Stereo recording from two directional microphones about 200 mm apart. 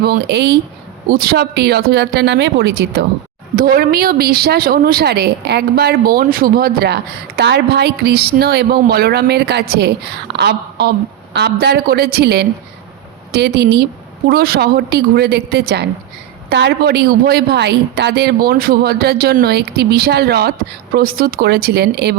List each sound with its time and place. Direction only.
0.0 s a woman's voice: 55° right (ahead or behind)
3.5 s a woman's voice: 45° right (ahead or behind)